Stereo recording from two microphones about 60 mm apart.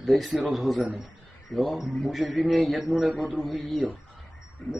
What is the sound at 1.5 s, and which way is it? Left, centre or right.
A man's voice, centre.